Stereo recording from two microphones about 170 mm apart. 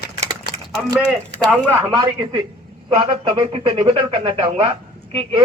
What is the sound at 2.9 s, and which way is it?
Speech, 30° right (ahead or behind).